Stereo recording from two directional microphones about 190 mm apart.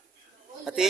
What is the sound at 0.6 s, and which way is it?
Speech, centre (ahead or behind).